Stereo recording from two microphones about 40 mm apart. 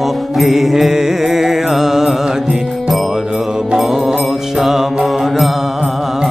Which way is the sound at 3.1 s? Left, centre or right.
Centre.